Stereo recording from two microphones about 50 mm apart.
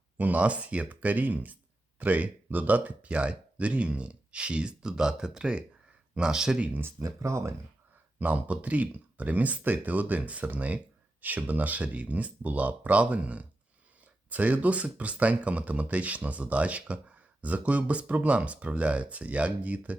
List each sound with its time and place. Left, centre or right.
0.2 s speech: right; by 6.6 s centre
7.0 s speech: right
8.2 s speech: right